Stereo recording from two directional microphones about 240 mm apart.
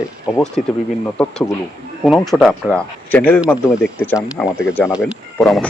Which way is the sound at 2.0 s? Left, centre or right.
Centre.